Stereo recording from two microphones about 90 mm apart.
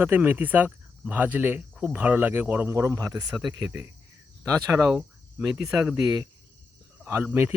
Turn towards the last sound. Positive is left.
turn(degrees=-25)  # may be behind; listen again after turning